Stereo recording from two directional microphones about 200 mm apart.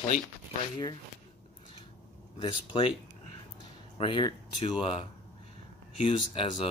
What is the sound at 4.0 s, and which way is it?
Speech, 25° left (ahead or behind).